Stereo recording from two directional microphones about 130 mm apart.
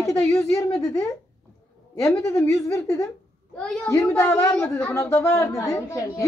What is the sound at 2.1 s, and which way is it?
Speech, 20° left (ahead or behind).